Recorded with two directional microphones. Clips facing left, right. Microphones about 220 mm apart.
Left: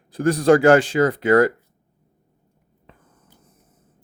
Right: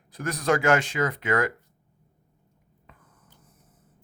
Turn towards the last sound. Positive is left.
turn(degrees=30)  # may be behind; listen again after turning